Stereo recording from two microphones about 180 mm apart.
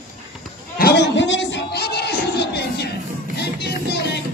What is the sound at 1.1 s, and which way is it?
Music, 85° left.